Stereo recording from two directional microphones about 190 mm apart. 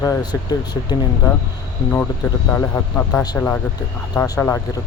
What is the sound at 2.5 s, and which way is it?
A man's voice, 15° left (ahead or behind).